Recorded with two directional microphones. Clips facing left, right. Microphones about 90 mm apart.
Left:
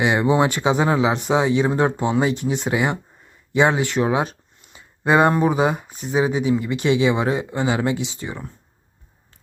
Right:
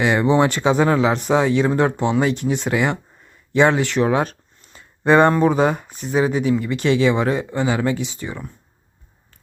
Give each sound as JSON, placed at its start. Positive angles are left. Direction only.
{"t": 0.0, "sound": "speech", "side_deg": 15}
{"t": 5.6, "sound": "speech", "side_deg": 5}